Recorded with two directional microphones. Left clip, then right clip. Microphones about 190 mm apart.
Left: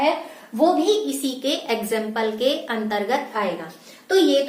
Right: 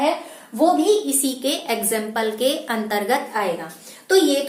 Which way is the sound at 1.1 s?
20° right (ahead or behind).